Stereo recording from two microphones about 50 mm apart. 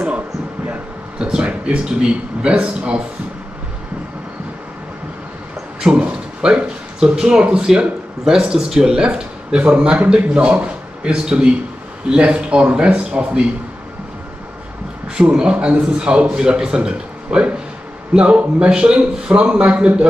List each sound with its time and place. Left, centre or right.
1.1 s speech: centre
5.8 s speech: centre
15.1 s speech: centre